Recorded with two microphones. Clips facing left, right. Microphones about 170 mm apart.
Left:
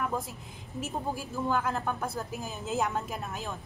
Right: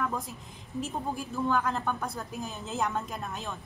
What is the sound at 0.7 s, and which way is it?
A woman's voice, 5° left (ahead or behind).